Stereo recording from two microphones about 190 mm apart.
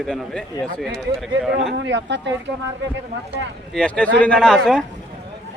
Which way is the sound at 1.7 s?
70° right (ahead or behind).